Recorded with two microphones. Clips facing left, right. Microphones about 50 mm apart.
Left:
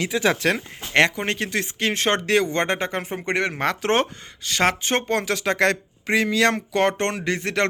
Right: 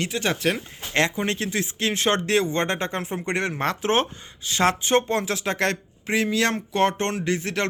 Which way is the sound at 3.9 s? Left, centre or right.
Left.